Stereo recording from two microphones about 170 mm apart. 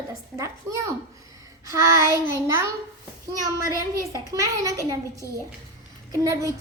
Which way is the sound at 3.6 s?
20° right (ahead or behind).